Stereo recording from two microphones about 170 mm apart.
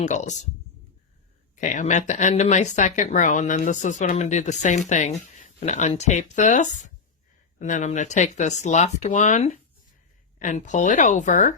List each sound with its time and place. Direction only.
0.0 s speech: 45° left (ahead or behind)
1.5 s speech: 45° left (ahead or behind)